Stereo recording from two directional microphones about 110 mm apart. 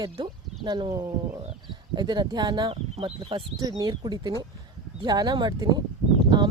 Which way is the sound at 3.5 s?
35° right (ahead or behind).